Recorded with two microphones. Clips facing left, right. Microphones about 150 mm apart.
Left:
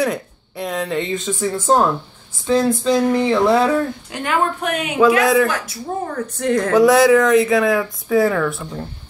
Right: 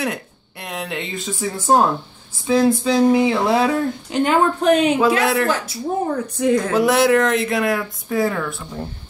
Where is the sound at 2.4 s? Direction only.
10° right (ahead or behind).